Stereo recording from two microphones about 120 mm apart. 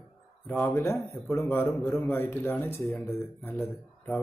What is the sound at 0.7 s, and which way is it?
Speech, 20° left (ahead or behind).